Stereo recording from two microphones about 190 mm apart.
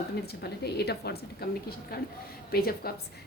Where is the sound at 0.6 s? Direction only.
60° left (ahead or behind).